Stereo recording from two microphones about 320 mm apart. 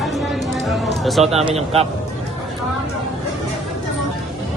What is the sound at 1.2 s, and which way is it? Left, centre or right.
Speech, centre.